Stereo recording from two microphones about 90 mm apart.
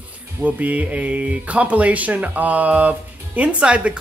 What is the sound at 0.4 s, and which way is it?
Speech, 15° right (ahead or behind).